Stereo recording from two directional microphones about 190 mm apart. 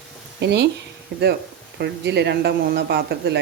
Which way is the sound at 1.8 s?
60° right (ahead or behind).